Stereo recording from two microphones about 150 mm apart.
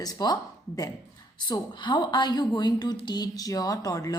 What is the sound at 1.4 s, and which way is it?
A woman's voice, 30° left (ahead or behind).